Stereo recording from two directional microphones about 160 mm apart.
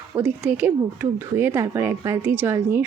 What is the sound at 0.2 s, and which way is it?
A woman's voice, 10° right (ahead or behind).